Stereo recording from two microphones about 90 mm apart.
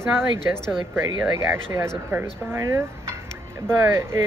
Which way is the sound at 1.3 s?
30° right (ahead or behind).